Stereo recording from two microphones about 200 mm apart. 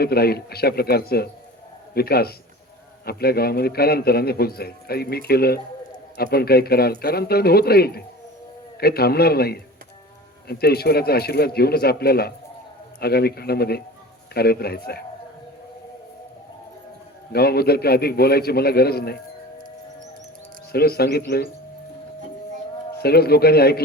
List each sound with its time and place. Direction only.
0.0 s a man's voice: 50° left (ahead or behind)
17.3 s a man's voice: 50° left (ahead or behind)
20.7 s a man's voice: 50° left (ahead or behind)
23.0 s a man's voice: 50° left (ahead or behind)